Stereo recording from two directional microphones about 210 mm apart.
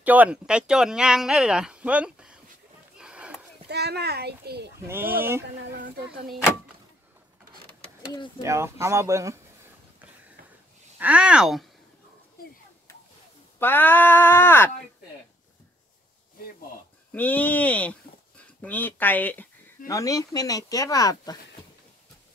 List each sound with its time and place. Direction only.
0.0 s speech: 5° right (ahead or behind)
3.0 s a sound: 5° right (ahead or behind)
3.6 s a child's voice: 50° right (ahead or behind)
4.7 s speech: 10° right (ahead or behind)
5.4 s speech: 55° right (ahead or behind)
8.5 s speech: 15° right (ahead or behind)
11.0 s speech: 5° right (ahead or behind)
13.6 s speech: 10° left (ahead or behind)
17.1 s speech: 10° left (ahead or behind)